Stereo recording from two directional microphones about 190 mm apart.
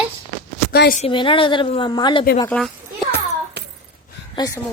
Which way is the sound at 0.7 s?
55° left (ahead or behind).